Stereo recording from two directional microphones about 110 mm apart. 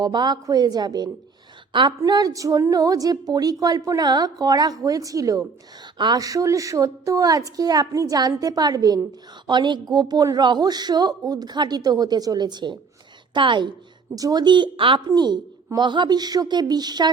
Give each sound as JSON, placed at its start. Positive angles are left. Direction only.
{"t": 0.0, "sound": "a woman's voice", "side_deg": -40}
{"t": 14.2, "sound": "a woman's voice", "side_deg": -35}